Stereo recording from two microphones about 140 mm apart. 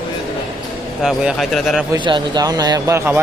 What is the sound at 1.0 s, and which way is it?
Speech, 5° right (ahead or behind).